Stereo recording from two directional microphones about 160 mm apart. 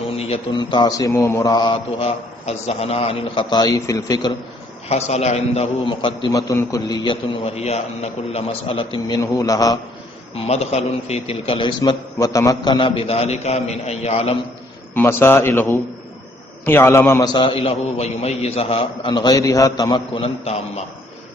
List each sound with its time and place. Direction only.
0.2 s a man's voice: 30° left (ahead or behind)
1.7 s a man's voice: 40° left (ahead or behind); by 4.3 s 20° left (ahead or behind)
4.9 s a man's voice: 40° left (ahead or behind); by 9.7 s 20° left (ahead or behind)
10.3 s a man's voice: 40° left (ahead or behind)
11.8 s a man's voice: 20° left (ahead or behind); by 14.3 s 40° left (ahead or behind)
14.9 s a man's voice: 15° left (ahead or behind)
20.2 s a man's voice: 40° left (ahead or behind)